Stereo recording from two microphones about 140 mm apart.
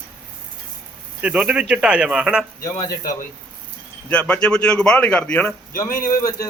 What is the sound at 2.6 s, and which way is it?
Speech, 25° left (ahead or behind).